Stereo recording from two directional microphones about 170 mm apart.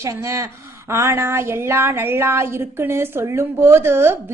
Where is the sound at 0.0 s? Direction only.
15° right (ahead or behind).